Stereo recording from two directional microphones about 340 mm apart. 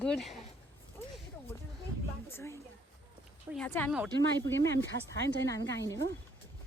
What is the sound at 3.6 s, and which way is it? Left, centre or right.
Speech, centre.